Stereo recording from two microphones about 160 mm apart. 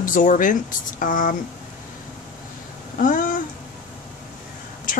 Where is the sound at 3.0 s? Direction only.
55° left (ahead or behind).